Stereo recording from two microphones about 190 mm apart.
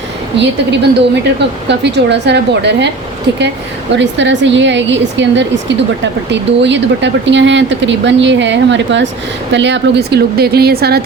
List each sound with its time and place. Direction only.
0.3 s a woman's voice: 65° right (ahead or behind)
3.9 s a woman's voice: 70° right (ahead or behind)